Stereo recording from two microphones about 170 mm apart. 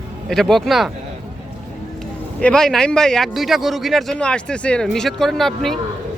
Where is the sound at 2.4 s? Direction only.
5° left (ahead or behind).